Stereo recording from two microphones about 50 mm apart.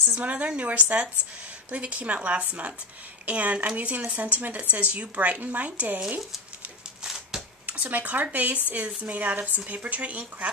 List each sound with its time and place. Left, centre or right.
0.2 s speech: right
7.0 s a sound: centre
7.6 s speech: right